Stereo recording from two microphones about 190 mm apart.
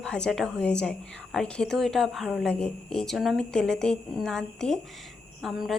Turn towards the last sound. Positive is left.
turn(degrees=0)  # may be behind; listen again after turning